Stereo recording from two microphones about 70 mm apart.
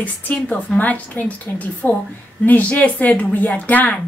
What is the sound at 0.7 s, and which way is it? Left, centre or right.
A woman's voice, left.